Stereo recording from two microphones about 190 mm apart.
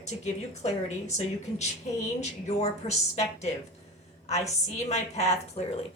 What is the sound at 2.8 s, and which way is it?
Speech, 30° left (ahead or behind).